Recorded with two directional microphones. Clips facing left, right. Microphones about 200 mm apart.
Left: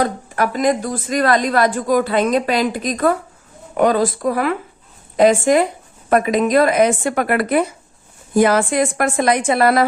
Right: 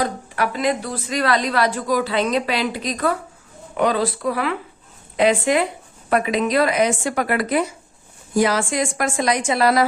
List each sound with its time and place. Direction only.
0.0 s a woman's voice: 45° left (ahead or behind)